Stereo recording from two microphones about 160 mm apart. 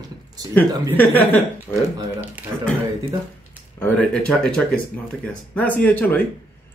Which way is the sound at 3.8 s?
10° left (ahead or behind).